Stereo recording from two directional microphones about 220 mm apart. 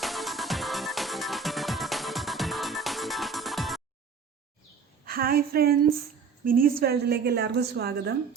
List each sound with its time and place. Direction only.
0.0 s music: centre (ahead or behind)
5.0 s a woman's voice: 45° right (ahead or behind)